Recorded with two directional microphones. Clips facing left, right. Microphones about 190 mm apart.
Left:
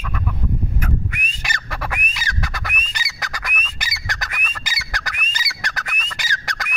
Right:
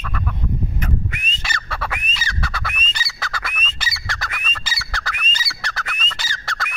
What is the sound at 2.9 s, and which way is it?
Bird, 15° left (ahead or behind).